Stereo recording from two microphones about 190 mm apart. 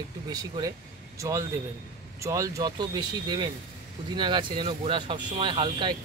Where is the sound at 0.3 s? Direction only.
20° right (ahead or behind).